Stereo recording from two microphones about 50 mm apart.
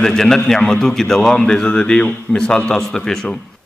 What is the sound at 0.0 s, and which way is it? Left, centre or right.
A man's voice, centre.